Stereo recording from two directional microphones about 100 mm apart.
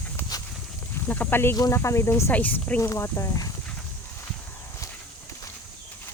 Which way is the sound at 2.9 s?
30° left (ahead or behind).